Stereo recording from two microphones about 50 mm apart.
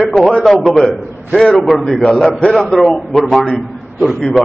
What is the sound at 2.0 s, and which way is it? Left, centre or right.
Speech, centre.